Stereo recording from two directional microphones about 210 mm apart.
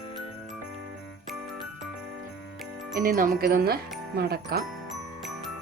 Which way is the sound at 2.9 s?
45° right (ahead or behind).